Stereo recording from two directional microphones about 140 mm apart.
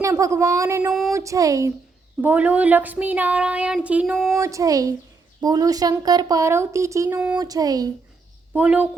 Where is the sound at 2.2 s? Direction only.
10° right (ahead or behind).